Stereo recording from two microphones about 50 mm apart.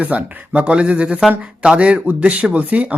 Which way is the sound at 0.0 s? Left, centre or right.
Right.